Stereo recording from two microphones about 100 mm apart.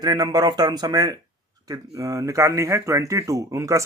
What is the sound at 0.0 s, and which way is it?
Speech, 45° right (ahead or behind).